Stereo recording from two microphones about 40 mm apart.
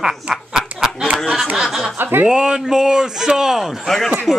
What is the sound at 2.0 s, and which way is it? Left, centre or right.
Speech, right.